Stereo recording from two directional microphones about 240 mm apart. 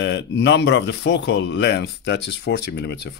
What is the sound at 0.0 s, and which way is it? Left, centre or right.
Speech, left.